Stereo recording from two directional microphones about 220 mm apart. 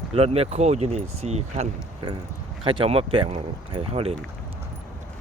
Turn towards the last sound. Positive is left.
turn(degrees=-25)  # may be behind; listen again after turning